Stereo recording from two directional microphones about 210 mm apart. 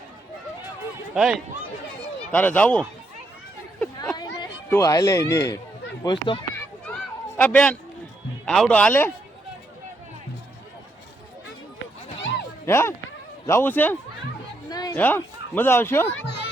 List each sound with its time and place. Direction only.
1.1 s speech: 5° right (ahead or behind)
2.3 s speech: 10° left (ahead or behind)
4.1 s speech: 20° left (ahead or behind)
7.3 s a man's voice: 5° left (ahead or behind)
12.6 s speech: 10° left (ahead or behind)
14.7 s a sound: 20° left (ahead or behind)
14.9 s speech: 10° left (ahead or behind)
16.1 s a sound: 55° left (ahead or behind)